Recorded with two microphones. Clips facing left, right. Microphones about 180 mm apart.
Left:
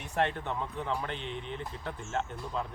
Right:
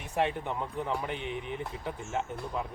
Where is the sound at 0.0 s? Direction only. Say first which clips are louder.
Right 1 dB; 10° right (ahead or behind).